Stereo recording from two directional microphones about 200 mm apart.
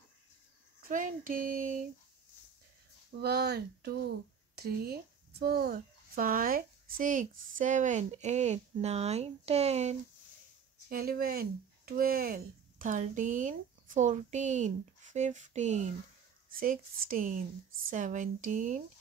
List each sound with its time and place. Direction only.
0.8 s speech: 40° right (ahead or behind)
3.2 s speech: 55° right (ahead or behind); by 9.9 s 35° right (ahead or behind)
10.9 s speech: 45° right (ahead or behind)